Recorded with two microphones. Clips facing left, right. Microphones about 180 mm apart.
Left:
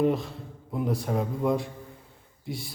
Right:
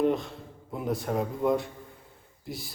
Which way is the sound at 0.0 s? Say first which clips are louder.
Left 1 dB; centre (ahead or behind).